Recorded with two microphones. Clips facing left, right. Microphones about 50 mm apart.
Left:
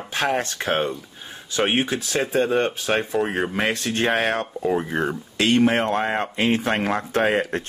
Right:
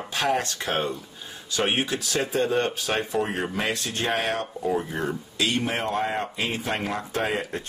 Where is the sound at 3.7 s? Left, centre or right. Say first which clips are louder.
Left 5 dB; left.